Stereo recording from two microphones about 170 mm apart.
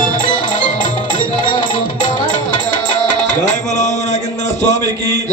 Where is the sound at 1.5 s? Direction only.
25° left (ahead or behind).